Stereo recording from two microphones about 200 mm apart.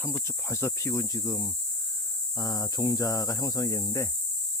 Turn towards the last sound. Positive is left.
turn(degrees=15)  # may be behind; listen again after turning